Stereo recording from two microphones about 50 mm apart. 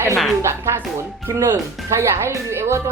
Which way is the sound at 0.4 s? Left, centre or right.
Right.